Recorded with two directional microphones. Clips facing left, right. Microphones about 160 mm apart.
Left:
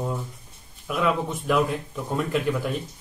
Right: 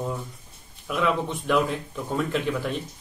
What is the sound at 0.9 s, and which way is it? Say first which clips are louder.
A man's voice: even; centre (ahead or behind).